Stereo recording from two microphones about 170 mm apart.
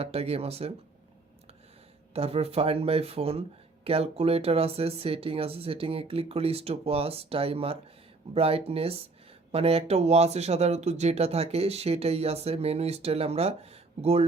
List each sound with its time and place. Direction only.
0.0 s speech: 35° right (ahead or behind)
2.1 s speech: 35° right (ahead or behind)